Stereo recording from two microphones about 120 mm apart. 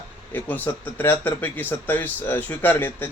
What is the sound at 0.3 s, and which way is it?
Speech, 15° left (ahead or behind).